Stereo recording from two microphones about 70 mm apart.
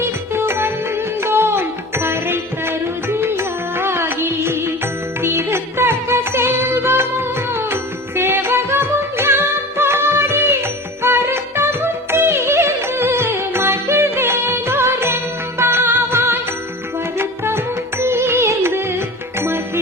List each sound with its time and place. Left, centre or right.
0.3 s music: right